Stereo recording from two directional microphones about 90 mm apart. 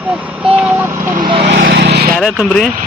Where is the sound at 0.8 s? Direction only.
30° right (ahead or behind).